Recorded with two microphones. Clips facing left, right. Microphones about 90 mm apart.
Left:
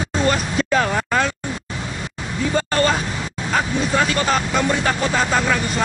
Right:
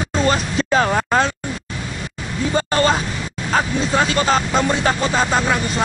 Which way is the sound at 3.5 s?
25° right (ahead or behind).